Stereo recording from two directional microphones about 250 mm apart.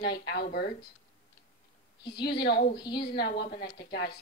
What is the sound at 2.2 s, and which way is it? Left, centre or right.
A woman's voice, left.